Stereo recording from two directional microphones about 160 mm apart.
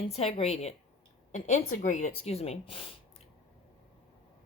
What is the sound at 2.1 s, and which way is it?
Speech, 40° left (ahead or behind).